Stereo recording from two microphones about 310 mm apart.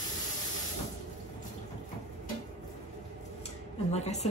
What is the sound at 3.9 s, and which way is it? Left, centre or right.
Speech, left.